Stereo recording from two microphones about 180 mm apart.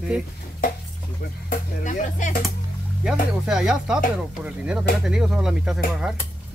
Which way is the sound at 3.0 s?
5° right (ahead or behind).